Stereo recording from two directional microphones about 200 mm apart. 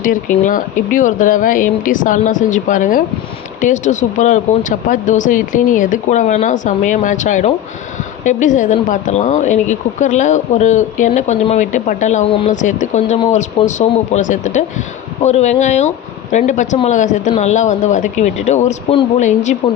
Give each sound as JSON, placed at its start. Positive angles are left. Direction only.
{"t": 0.0, "sound": "speech", "side_deg": 40}